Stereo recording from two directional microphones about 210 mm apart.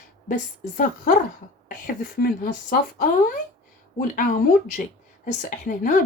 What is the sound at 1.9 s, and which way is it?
Speech, 40° left (ahead or behind).